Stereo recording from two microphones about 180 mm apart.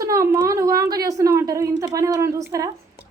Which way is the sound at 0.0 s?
15° right (ahead or behind).